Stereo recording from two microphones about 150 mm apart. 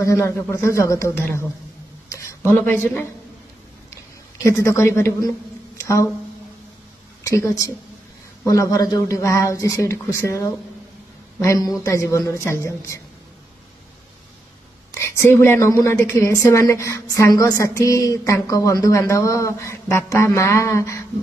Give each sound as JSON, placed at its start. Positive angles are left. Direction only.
{"t": 0.0, "sound": "a woman's voice", "side_deg": 20}
{"t": 4.4, "sound": "a woman's voice", "side_deg": 20}
{"t": 5.8, "sound": "a sound", "side_deg": 20}
{"t": 7.2, "sound": "a woman's voice", "side_deg": 20}
{"t": 15.0, "sound": "a woman's voice", "side_deg": 20}